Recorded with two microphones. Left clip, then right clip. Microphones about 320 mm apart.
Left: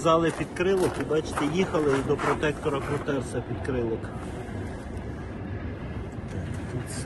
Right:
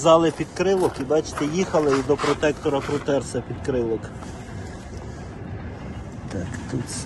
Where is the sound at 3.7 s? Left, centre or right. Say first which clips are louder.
Right 6 dB; centre.